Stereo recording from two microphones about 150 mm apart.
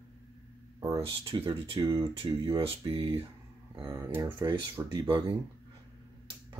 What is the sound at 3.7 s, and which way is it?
Speech, 20° right (ahead or behind).